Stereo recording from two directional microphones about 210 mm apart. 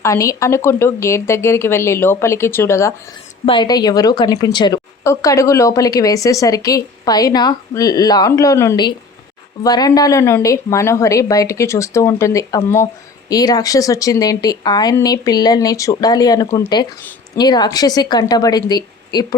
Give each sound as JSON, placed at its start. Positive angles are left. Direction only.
{"t": 0.0, "sound": "speech", "side_deg": 15}
{"t": 3.4, "sound": "a woman's voice", "side_deg": 25}